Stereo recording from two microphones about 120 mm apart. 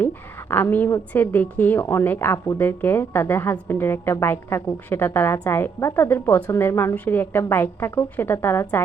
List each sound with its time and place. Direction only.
0.5 s a woman's voice: 15° left (ahead or behind)